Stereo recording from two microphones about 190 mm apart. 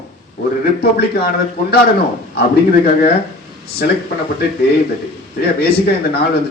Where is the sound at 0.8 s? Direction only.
55° left (ahead or behind).